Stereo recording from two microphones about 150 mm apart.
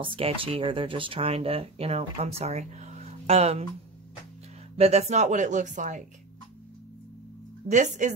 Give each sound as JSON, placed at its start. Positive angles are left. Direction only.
{"t": 0.0, "sound": "speech", "side_deg": -35}
{"t": 4.7, "sound": "speech", "side_deg": -45}
{"t": 7.6, "sound": "speech", "side_deg": -50}